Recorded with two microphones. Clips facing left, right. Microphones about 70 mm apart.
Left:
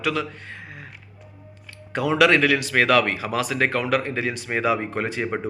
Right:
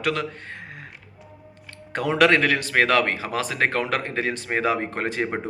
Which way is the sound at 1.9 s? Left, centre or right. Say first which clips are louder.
Left 1 dB; right.